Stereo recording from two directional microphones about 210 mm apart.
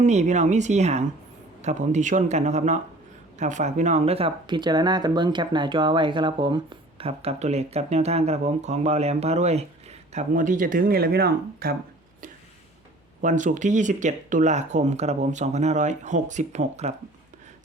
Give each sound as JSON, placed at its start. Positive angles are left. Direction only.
{"t": 0.0, "sound": "speech", "side_deg": -35}
{"t": 13.2, "sound": "speech", "side_deg": -35}